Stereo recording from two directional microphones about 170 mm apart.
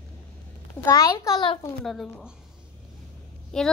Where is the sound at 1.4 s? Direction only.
30° left (ahead or behind).